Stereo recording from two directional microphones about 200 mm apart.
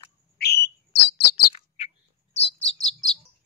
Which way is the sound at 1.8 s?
30° left (ahead or behind).